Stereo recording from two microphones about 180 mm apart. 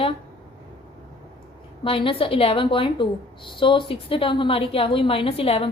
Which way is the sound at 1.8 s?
30° left (ahead or behind).